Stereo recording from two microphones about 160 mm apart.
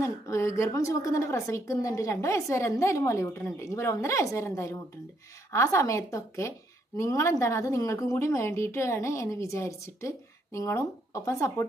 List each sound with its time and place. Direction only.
0.0 s a woman's voice: 20° left (ahead or behind)